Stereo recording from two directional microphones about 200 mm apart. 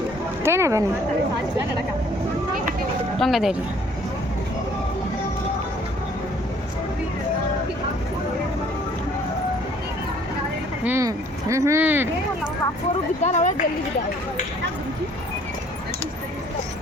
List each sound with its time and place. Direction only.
0.4 s speech: 15° right (ahead or behind)
3.2 s speech: centre (ahead or behind)
10.8 s speech: 15° right (ahead or behind)
13.2 s speech: 35° left (ahead or behind)